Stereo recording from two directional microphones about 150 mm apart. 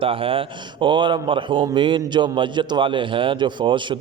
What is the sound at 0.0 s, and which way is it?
Speech, 35° right (ahead or behind).